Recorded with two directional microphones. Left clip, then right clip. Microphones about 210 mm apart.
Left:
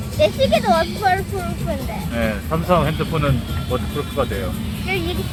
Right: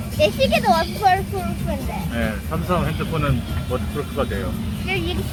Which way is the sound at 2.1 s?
20° left (ahead or behind).